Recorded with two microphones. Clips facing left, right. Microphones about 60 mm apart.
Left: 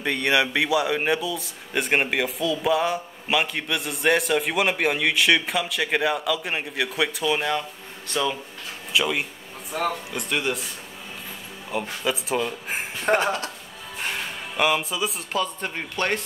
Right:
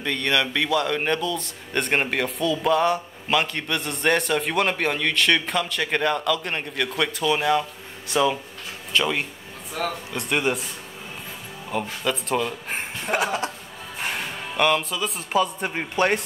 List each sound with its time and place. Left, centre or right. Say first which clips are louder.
0.0 s speech: left 1 dB; centre
8.9 s speech: right 1 dB; centre
10.3 s a man's voice: right 3 dB; centre
12.0 s speech: even; centre
13.1 s a sound: left 4 dB; left
14.1 s music: right 2 dB; centre
15.3 s speech: right 7 dB; centre